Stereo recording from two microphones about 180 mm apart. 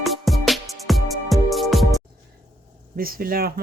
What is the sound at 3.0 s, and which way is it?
Speech, 55° right (ahead or behind).